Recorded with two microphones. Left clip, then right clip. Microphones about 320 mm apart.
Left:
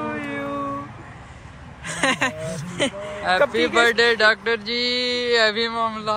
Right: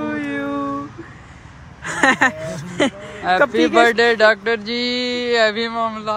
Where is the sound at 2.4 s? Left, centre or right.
Right.